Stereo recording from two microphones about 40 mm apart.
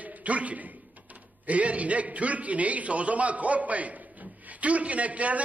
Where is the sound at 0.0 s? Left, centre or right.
Right.